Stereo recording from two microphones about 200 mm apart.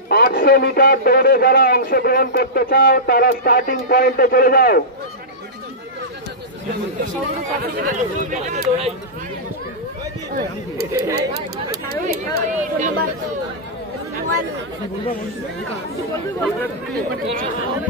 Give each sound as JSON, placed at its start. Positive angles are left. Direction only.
{"t": 0.1, "sound": "a man's voice", "side_deg": 50}
{"t": 7.6, "sound": "speech", "side_deg": -45}
{"t": 10.9, "sound": "speech", "side_deg": -15}
{"t": 11.3, "sound": "speech", "side_deg": -50}
{"t": 12.1, "sound": "speech", "side_deg": -35}